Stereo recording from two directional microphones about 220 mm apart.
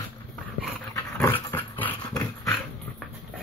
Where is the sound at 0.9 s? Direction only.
10° left (ahead or behind).